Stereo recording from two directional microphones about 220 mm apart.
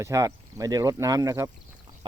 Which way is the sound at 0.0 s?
15° right (ahead or behind).